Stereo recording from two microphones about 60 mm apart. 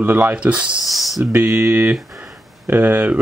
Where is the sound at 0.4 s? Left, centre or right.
Centre.